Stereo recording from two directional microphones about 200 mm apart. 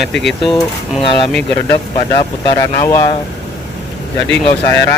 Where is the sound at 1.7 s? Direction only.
20° left (ahead or behind).